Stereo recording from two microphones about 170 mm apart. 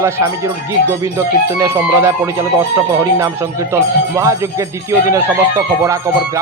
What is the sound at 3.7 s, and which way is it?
Speech, 20° right (ahead or behind).